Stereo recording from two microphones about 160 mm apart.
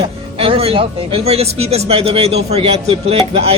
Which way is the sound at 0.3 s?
35° right (ahead or behind).